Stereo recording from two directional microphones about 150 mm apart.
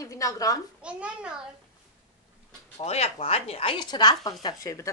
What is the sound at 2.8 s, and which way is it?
Speech, 45° left (ahead or behind).